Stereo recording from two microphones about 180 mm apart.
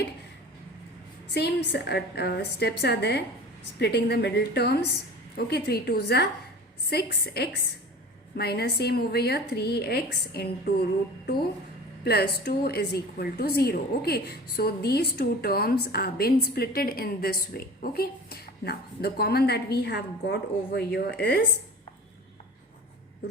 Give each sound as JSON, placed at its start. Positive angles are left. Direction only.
{"t": 1.3, "sound": "a woman's voice", "side_deg": 65}
{"t": 12.0, "sound": "a woman's voice", "side_deg": 60}